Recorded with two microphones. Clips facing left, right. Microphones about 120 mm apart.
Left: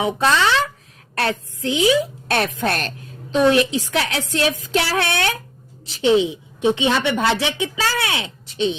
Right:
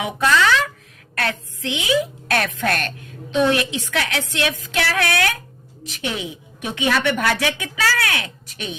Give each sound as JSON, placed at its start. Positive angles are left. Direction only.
{"t": 0.0, "sound": "a woman's voice", "side_deg": 25}